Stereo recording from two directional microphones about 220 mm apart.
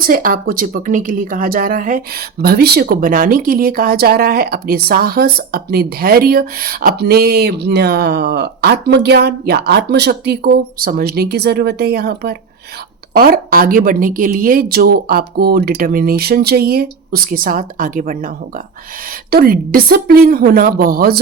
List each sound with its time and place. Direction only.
0.0 s a woman's voice: 40° right (ahead or behind)
19.3 s speech: 40° right (ahead or behind)